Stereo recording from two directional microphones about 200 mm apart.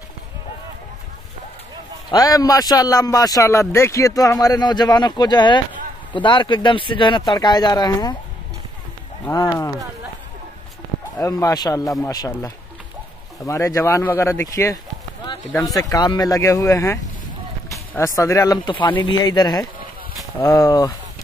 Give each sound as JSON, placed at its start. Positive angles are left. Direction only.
{"t": 2.0, "sound": "a man's voice", "side_deg": 20}
{"t": 9.2, "sound": "a man's voice", "side_deg": 15}
{"t": 11.1, "sound": "a man's voice", "side_deg": 15}